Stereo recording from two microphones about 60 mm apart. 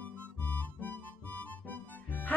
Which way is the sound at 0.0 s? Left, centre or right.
Left.